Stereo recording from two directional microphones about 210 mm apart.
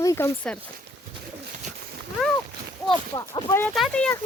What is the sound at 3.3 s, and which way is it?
Speech, 15° left (ahead or behind).